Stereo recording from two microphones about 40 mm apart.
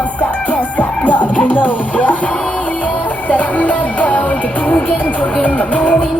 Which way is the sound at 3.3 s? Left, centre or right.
Left.